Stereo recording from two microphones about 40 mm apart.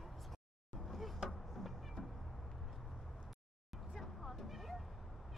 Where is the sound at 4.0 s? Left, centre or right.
Centre.